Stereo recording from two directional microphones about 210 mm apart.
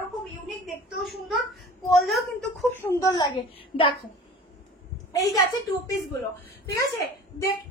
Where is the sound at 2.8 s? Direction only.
15° left (ahead or behind).